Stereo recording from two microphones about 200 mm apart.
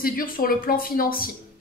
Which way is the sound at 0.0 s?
45° left (ahead or behind).